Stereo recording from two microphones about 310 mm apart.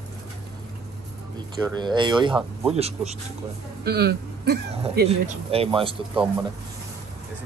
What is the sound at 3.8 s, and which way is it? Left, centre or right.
Speech, right.